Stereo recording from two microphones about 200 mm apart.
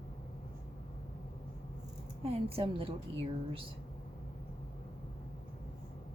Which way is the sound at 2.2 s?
30° right (ahead or behind).